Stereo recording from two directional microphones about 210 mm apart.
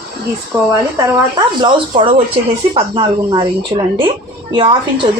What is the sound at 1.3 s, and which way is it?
A woman's voice, 20° right (ahead or behind).